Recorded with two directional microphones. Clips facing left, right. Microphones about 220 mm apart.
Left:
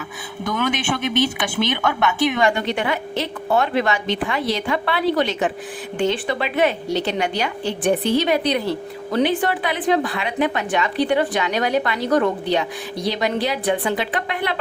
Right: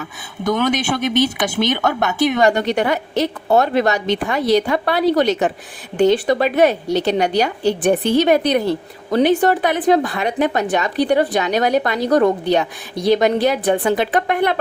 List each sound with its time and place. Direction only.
0.4 s a woman's voice: 35° right (ahead or behind)